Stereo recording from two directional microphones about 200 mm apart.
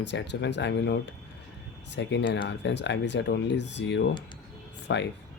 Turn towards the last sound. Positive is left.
turn(degrees=60)  # may be behind; listen again after turning